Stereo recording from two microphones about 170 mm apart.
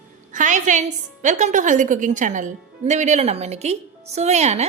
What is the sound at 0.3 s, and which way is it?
A woman's voice, 45° right (ahead or behind).